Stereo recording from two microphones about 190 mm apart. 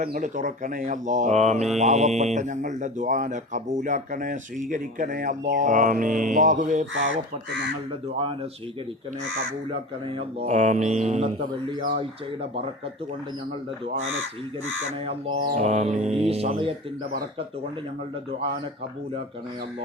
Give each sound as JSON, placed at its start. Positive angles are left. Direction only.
{"t": 0.0, "sound": "speech", "side_deg": -45}
{"t": 6.9, "sound": "speech", "side_deg": -75}
{"t": 8.0, "sound": "speech", "side_deg": -30}
{"t": 10.1, "sound": "speech", "side_deg": -35}
{"t": 15.5, "sound": "speech", "side_deg": -35}